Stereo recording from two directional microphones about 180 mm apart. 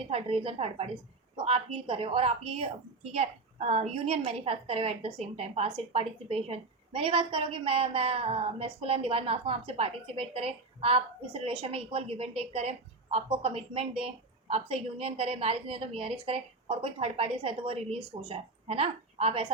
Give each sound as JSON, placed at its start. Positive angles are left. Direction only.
{"t": 0.1, "sound": "a woman's voice", "side_deg": -30}